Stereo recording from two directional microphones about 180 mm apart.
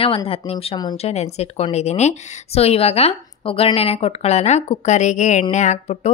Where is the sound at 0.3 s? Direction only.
30° left (ahead or behind).